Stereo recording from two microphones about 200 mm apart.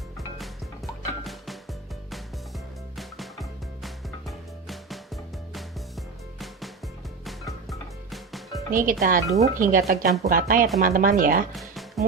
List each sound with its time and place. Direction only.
1.2 s music: centre (ahead or behind)
3.0 s music: centre (ahead or behind)
7.7 s music: centre (ahead or behind)
8.7 s speech: 45° right (ahead or behind)
11.5 s music: centre (ahead or behind)